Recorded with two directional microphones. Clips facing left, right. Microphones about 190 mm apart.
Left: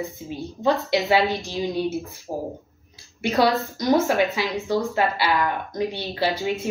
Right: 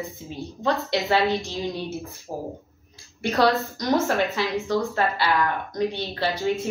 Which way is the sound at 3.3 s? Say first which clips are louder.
Even; centre (ahead or behind).